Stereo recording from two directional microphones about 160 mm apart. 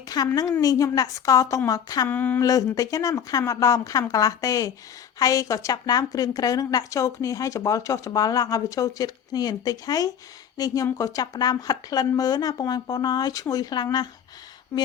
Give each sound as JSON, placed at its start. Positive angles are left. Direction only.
{"t": 0.3, "sound": "a woman's voice", "side_deg": 20}
{"t": 2.0, "sound": "a sound", "side_deg": 10}
{"t": 2.5, "sound": "a woman's voice", "side_deg": 20}